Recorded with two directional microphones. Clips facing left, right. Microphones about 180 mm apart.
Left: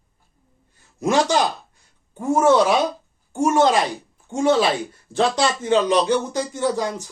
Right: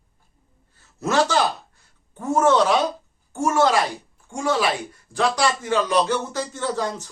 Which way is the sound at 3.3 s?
20° left (ahead or behind).